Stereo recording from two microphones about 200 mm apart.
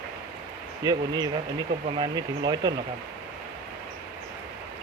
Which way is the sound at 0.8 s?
20° right (ahead or behind).